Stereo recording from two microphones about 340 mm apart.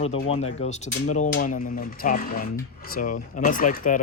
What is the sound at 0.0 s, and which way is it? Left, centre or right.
Speech, centre.